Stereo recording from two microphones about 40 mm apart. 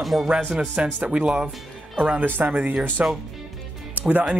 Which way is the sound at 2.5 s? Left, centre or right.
Right.